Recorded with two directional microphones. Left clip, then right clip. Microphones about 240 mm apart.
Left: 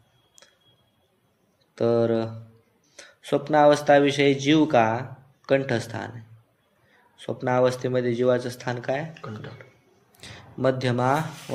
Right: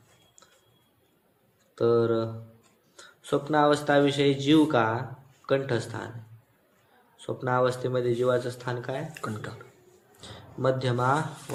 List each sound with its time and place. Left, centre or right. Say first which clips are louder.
1.7 s speech: left 1 dB; left
7.2 s speech: left 4 dB; left
10.2 s speech: left 4 dB; left